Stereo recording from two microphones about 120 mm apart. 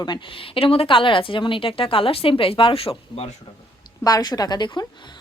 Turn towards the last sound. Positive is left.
turn(degrees=40)  # may be behind; listen again after turning